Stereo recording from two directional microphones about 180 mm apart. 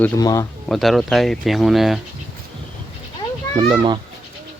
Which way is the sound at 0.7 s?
Centre (ahead or behind).